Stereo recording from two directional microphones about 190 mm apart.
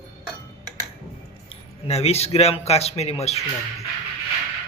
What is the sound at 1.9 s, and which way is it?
A man's voice, 35° left (ahead or behind).